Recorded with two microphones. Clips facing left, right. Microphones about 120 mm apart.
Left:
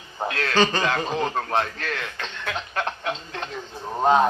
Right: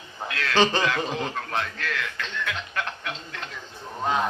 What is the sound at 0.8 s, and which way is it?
A man's voice, 35° left (ahead or behind).